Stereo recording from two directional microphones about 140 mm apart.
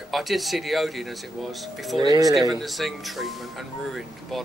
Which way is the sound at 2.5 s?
Centre (ahead or behind).